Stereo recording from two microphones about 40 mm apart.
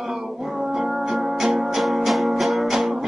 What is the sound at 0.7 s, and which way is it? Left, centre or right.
Music, centre.